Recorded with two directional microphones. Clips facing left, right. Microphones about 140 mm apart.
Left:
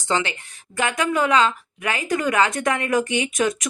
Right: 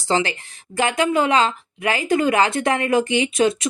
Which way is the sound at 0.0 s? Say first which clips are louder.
Right 3 dB; 35° right (ahead or behind).